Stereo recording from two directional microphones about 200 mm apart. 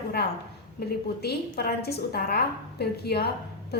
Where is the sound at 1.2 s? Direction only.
50° left (ahead or behind).